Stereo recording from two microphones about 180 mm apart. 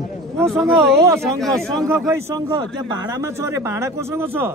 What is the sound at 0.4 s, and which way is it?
A man's voice, centre (ahead or behind).